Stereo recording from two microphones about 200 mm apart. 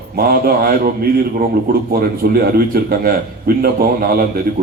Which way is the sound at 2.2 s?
50° right (ahead or behind).